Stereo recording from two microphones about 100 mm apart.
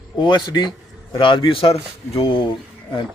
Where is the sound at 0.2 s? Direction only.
50° left (ahead or behind).